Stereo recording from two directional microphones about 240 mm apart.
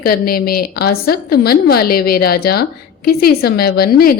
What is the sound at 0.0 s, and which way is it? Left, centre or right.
A woman's voice, left.